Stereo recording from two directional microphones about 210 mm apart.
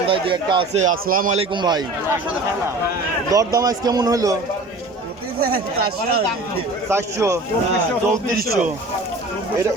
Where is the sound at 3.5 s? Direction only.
15° right (ahead or behind).